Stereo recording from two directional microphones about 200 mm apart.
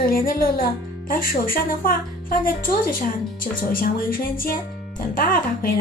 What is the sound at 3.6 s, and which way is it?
Speech, 45° left (ahead or behind).